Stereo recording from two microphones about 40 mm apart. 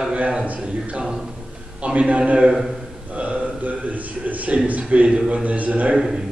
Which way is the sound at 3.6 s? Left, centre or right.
Right.